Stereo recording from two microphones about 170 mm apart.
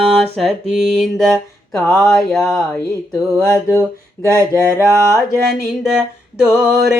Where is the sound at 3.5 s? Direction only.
15° left (ahead or behind).